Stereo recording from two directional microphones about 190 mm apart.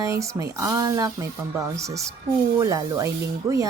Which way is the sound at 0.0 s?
15° right (ahead or behind).